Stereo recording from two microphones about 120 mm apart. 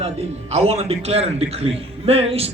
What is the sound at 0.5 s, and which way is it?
A man's voice, 60° right (ahead or behind).